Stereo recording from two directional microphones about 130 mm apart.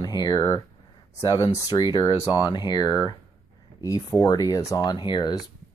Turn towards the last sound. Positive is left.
turn(degrees=35)  # may be behind; listen again after turning